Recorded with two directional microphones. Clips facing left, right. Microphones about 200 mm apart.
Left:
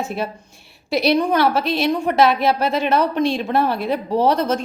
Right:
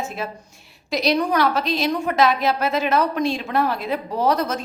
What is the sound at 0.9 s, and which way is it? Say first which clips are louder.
A woman's voice: left 3 dB; 30° left (ahead or behind).